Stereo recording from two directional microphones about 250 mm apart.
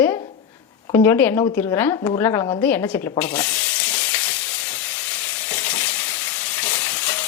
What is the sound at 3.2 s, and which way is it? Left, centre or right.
Frying, centre.